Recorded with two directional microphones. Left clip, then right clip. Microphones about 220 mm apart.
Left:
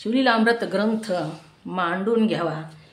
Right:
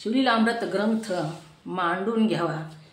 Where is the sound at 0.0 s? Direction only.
40° left (ahead or behind).